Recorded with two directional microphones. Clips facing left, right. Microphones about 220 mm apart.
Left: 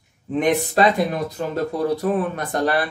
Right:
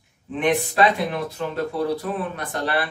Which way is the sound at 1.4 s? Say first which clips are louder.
Left 2 dB; 40° left (ahead or behind).